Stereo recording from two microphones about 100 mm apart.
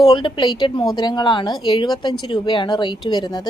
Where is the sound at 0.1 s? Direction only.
50° left (ahead or behind).